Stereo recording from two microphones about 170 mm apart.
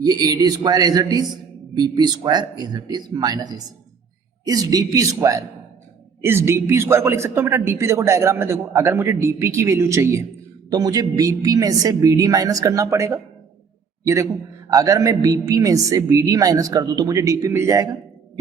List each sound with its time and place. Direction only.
0.0 s a man's voice: 20° right (ahead or behind)